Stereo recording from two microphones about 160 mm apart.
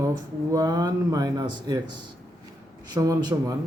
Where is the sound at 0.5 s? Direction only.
25° right (ahead or behind).